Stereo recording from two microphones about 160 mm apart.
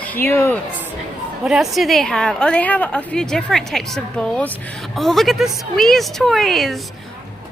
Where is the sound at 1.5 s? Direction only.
Centre (ahead or behind).